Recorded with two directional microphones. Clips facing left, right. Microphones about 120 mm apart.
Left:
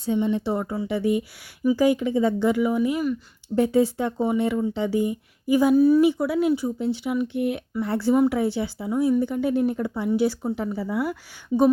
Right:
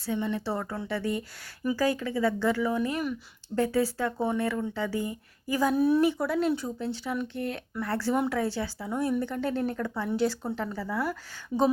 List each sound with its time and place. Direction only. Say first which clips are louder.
0.0 s speech: left 7 dB; 20° left (ahead or behind)
5.7 s speech: left 5 dB; centre (ahead or behind); by 8.9 s 15° left (ahead or behind)
8.9 s speech: left 7 dB; 5° left (ahead or behind)
11.0 s speech: left 4 dB; 5° left (ahead or behind)